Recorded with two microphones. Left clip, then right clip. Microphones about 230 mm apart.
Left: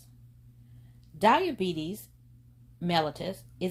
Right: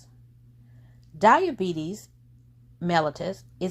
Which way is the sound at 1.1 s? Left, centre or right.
Right.